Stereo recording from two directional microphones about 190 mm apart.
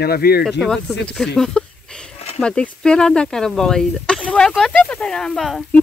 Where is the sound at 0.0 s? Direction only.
55° left (ahead or behind).